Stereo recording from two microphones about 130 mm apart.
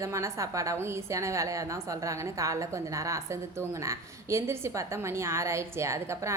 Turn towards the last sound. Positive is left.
turn(degrees=-20)  # may be behind; listen again after turning